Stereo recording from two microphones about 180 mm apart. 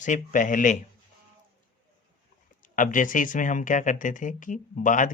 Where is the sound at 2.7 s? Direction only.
45° left (ahead or behind).